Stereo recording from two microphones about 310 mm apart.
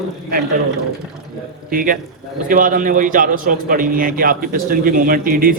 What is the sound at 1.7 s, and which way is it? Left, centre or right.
A man's voice, right.